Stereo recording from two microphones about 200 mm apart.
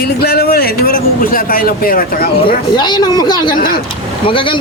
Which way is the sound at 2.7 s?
20° left (ahead or behind).